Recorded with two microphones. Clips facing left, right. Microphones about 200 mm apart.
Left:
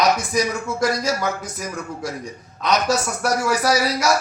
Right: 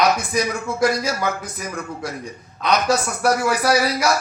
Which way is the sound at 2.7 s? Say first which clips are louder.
Right 1 dB; 55° right (ahead or behind).